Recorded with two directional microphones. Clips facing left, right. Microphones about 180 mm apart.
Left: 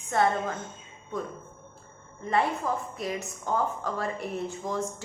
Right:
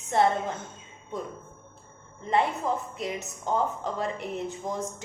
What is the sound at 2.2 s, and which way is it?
A woman's voice, 20° right (ahead or behind).